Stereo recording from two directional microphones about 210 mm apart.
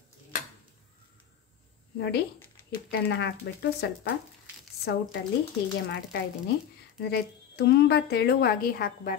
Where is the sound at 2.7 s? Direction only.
50° left (ahead or behind).